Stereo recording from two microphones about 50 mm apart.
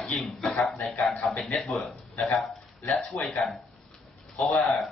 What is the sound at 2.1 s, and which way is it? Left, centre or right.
Speech, centre.